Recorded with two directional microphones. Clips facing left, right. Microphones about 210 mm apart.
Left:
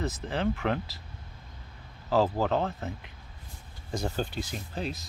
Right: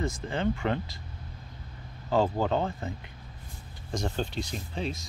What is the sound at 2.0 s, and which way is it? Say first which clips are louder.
Speech: even; centre (ahead or behind).